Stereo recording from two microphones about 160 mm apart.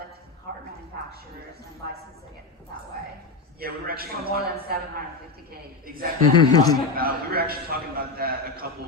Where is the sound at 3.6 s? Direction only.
70° right (ahead or behind).